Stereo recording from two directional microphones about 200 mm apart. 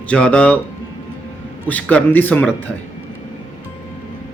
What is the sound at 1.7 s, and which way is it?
A man's voice, 5° left (ahead or behind).